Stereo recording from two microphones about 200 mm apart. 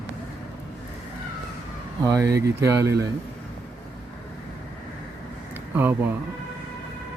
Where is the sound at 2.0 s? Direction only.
15° right (ahead or behind).